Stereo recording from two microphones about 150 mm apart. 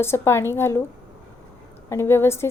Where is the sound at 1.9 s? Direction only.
15° left (ahead or behind).